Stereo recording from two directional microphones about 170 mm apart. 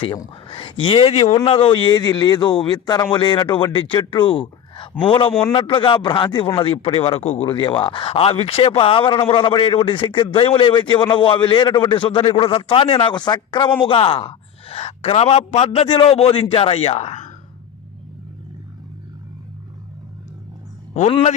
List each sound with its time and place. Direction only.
0.0 s speech: 30° left (ahead or behind)
20.9 s speech: 40° left (ahead or behind)